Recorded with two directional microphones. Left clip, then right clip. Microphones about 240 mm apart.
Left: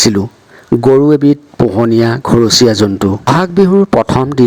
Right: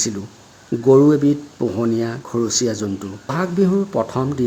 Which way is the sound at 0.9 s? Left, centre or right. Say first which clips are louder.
Left 5 dB; left.